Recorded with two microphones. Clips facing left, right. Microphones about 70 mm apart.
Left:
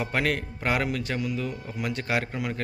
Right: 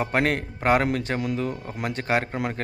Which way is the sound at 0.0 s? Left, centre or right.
Right.